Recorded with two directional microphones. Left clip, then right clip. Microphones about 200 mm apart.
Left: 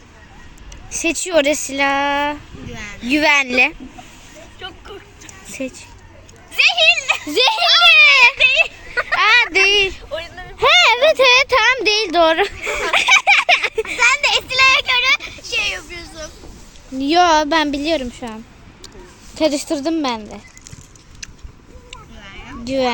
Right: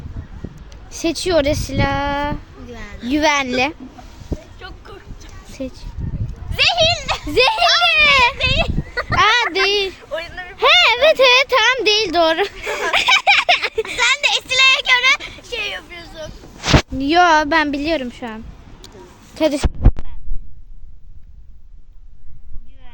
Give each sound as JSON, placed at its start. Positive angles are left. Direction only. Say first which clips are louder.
{"t": 0.9, "sound": "a woman's voice", "louder": "right 1 dB", "side_deg": 0}
{"t": 4.6, "sound": "a sound", "louder": "left 4 dB", "side_deg": 0}
{"t": 6.6, "sound": "speech", "louder": "left 2 dB", "side_deg": -25}
{"t": 7.1, "sound": "a woman's voice", "louder": "even", "side_deg": 0}
{"t": 8.4, "sound": "a sound", "louder": "left 5 dB", "side_deg": 10}
{"t": 9.1, "sound": "a woman's voice", "louder": "left 1 dB", "side_deg": -5}
{"t": 10.1, "sound": "a sound", "louder": "right 1 dB", "side_deg": 20}
{"t": 10.6, "sound": "a woman's voice", "louder": "even", "side_deg": 0}
{"t": 12.9, "sound": "a sound", "louder": "left 1 dB", "side_deg": 0}
{"t": 14.1, "sound": "speech", "louder": "left 1 dB", "side_deg": -15}
{"t": 17.0, "sound": "a woman's voice", "louder": "left 1 dB", "side_deg": 0}
{"t": 19.4, "sound": "a woman's voice", "louder": "even", "side_deg": 0}